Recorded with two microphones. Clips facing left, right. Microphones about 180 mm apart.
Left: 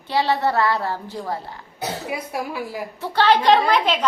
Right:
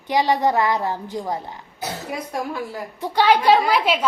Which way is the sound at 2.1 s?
10° left (ahead or behind).